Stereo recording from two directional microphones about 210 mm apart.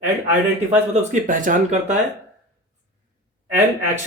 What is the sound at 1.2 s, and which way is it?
Speech, 40° right (ahead or behind).